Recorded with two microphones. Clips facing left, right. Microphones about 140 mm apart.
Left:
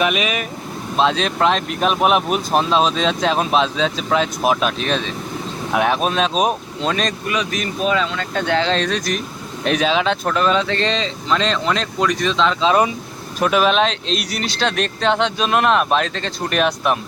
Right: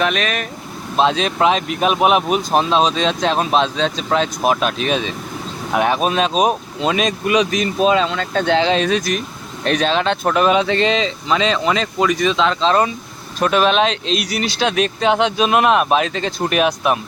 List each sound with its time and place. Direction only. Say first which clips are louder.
0.0 s speech: even; 5° left (ahead or behind)
7.3 s speech: right 6 dB; 20° right (ahead or behind)
8.5 s speech: right 3 dB; 15° right (ahead or behind)
10.2 s speech: right 3 dB; 15° right (ahead or behind)
12.6 s speech: even; 10° left (ahead or behind)